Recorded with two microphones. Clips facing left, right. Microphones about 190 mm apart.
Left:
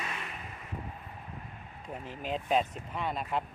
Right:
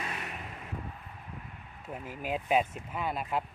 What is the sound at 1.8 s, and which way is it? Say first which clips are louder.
Speech: right 1 dB; 5° right (ahead or behind).